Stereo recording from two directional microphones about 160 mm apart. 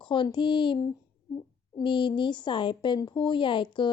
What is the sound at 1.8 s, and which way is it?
Speech, 30° left (ahead or behind).